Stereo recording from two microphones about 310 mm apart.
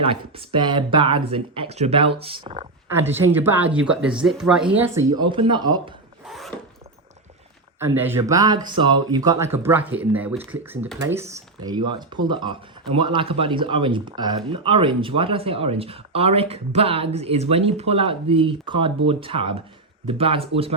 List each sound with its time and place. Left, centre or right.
0.0 s speech: centre
2.9 s speech: centre
6.2 s filing: centre
7.8 s speech: centre